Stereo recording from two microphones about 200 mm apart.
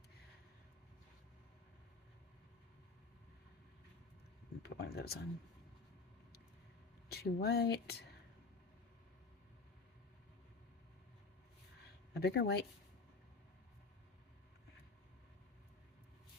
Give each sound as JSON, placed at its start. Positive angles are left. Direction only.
{"t": 4.6, "sound": "speech", "side_deg": 50}
{"t": 7.1, "sound": "speech", "side_deg": 55}
{"t": 12.1, "sound": "speech", "side_deg": 50}